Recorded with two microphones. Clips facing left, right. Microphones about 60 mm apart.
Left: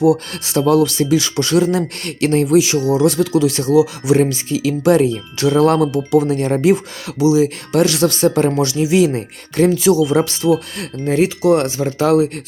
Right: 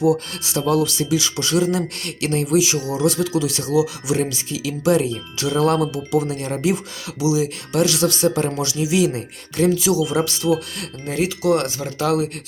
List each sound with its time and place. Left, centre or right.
0.0 s speech: left